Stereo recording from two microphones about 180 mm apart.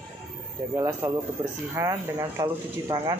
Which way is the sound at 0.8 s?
20° right (ahead or behind).